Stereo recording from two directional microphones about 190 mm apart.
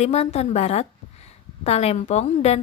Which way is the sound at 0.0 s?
35° left (ahead or behind).